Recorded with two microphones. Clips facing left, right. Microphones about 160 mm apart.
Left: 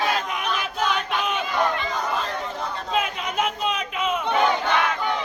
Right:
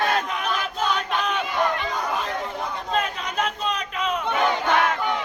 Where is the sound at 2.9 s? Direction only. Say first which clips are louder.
Left 1 dB; 5° left (ahead or behind).